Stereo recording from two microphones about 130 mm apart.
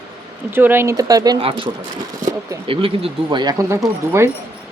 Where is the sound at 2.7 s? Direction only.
45° right (ahead or behind).